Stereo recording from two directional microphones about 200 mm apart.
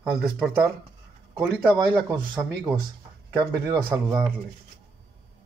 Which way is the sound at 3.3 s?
20° right (ahead or behind).